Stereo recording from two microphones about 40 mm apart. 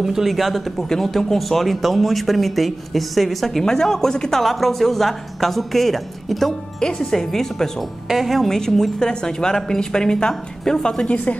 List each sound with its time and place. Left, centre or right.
0.0 s a woman's voice: centre
8.1 s speech: centre
8.5 s a woman's voice: centre